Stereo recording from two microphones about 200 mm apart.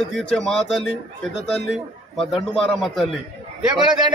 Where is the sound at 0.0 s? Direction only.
5° left (ahead or behind).